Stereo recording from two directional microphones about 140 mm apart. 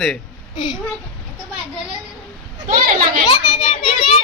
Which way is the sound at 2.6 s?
75° right (ahead or behind).